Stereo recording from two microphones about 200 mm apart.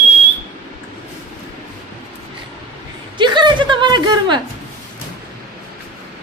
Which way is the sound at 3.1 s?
25° right (ahead or behind).